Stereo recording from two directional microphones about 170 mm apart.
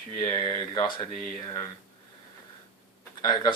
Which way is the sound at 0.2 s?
25° left (ahead or behind).